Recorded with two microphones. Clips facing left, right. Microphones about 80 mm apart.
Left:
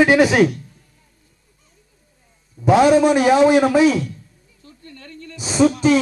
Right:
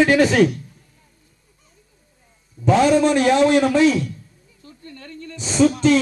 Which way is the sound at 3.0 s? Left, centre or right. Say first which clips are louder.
Left 2 dB; centre.